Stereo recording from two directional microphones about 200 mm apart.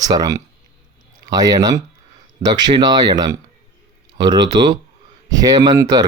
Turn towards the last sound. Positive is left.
turn(degrees=-20)  # may be behind; listen again after turning